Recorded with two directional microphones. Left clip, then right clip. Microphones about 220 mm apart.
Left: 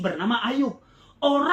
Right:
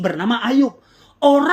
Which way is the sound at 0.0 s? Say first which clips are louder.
Right 5 dB; 45° right (ahead or behind).